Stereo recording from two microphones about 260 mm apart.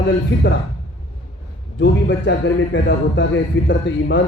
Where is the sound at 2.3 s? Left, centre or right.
Left.